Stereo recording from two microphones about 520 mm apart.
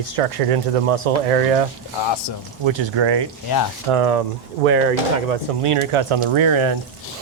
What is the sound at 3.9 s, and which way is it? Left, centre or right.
Speech, right.